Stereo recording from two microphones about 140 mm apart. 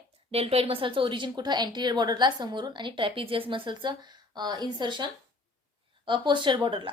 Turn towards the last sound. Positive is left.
turn(degrees=-35)  # may be behind; listen again after turning